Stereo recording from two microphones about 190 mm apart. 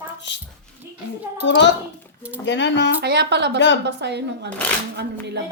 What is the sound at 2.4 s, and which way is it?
Speech, 70° left (ahead or behind).